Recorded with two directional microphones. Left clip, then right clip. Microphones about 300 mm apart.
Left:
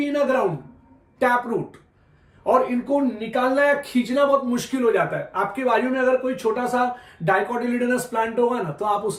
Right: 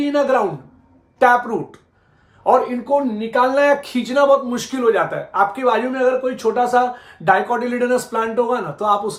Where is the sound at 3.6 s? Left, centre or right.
Centre.